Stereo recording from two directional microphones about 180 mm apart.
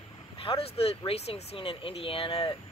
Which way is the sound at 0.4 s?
30° left (ahead or behind).